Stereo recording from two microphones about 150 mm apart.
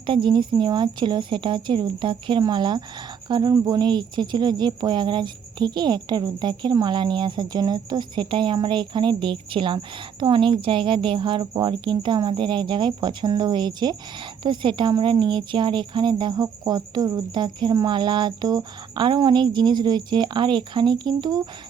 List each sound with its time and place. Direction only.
0.0 s a woman's voice: 35° right (ahead or behind)